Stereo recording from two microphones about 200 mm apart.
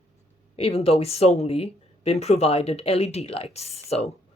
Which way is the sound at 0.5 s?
30° left (ahead or behind).